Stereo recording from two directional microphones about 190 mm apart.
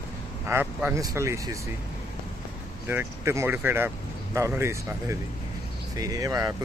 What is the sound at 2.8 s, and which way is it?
Speech, 10° right (ahead or behind).